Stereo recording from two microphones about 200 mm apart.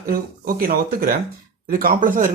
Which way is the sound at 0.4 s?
50° right (ahead or behind).